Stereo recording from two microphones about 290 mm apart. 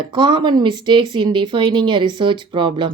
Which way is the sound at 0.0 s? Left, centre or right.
Centre.